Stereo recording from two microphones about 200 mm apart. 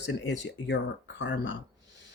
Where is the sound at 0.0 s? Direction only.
60° left (ahead or behind).